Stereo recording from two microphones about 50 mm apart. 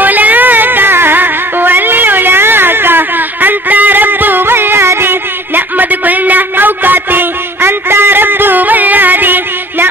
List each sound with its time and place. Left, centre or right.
0.0 s music: right
7.6 s music: right